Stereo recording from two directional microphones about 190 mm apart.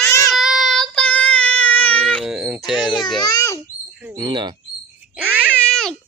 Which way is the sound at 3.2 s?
20° left (ahead or behind).